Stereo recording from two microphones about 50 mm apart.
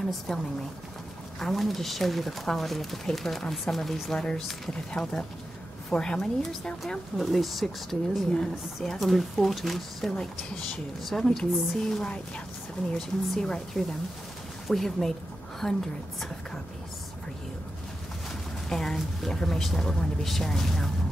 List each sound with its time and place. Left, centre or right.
0.0 s speech: centre
1.4 s speech: centre
4.9 s speech: centre
13.4 s a woman's voice: centre
18.7 s speech: centre